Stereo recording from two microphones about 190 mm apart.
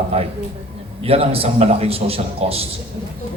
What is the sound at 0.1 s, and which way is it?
A man's voice, 30° right (ahead or behind).